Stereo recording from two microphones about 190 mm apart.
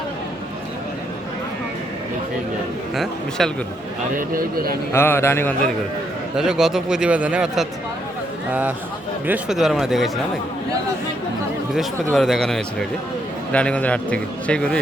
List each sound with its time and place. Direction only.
2.9 s speech: centre (ahead or behind)
4.2 s speech: 50° right (ahead or behind)
4.9 s a man's voice: 10° left (ahead or behind)
6.3 s speech: centre (ahead or behind)
11.7 s a man's voice: centre (ahead or behind)